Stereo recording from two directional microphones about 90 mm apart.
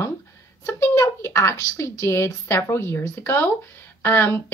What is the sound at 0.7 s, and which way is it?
A woman's voice, 35° left (ahead or behind).